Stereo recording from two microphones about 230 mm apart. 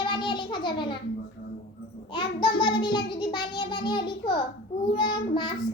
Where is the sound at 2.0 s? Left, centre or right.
Centre.